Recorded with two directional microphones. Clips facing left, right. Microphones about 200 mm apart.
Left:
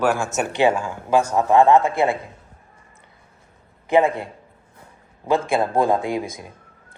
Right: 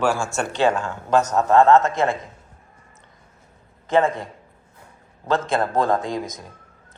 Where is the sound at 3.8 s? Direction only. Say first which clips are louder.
Left 2 dB; 15° left (ahead or behind).